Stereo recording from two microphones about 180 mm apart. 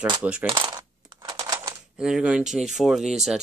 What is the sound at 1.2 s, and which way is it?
Typewriter, 20° right (ahead or behind).